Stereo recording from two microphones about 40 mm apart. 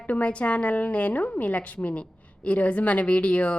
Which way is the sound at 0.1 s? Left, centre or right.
Left.